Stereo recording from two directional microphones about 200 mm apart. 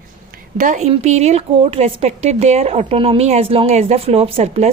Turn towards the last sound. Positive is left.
turn(degrees=-30)  # may be behind; listen again after turning